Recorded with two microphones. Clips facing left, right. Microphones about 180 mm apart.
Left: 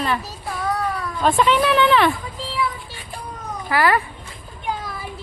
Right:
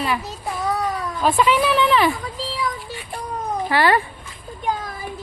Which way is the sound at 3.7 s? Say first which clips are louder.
Even; 30° right (ahead or behind).